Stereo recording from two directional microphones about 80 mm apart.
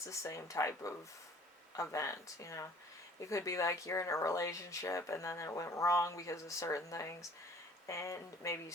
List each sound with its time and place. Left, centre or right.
0.0 s speech: left